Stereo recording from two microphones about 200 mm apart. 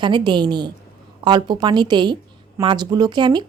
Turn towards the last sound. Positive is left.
turn(degrees=-20)  # may be behind; listen again after turning